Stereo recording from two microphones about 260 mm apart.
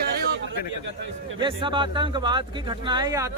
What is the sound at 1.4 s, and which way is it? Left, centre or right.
Speech, centre.